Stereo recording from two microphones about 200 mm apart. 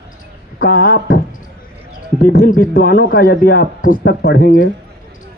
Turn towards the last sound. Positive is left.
turn(degrees=50)  # may be behind; listen again after turning